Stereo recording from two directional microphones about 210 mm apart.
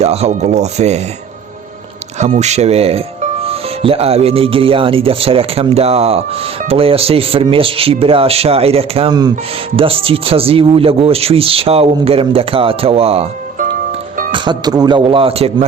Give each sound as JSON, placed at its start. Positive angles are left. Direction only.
{"t": 0.0, "sound": "speech", "side_deg": -30}
{"t": 2.1, "sound": "speech", "side_deg": -30}